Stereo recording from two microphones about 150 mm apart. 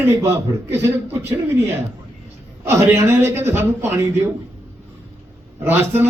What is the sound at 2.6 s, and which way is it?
A man's voice, 15° right (ahead or behind).